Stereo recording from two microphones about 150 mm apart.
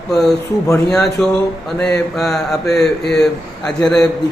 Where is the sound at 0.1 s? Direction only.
5° left (ahead or behind).